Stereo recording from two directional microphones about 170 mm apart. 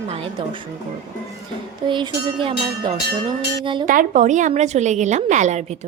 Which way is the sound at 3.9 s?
50° right (ahead or behind).